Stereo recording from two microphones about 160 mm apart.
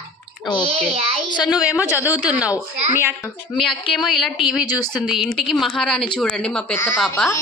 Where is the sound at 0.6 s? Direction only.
35° right (ahead or behind).